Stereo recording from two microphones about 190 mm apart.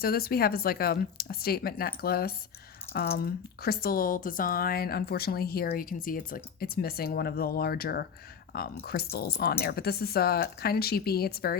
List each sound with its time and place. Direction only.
0.0 s speech: 55° left (ahead or behind)